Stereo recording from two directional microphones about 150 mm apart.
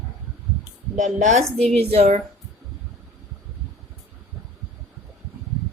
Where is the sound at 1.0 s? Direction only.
55° right (ahead or behind).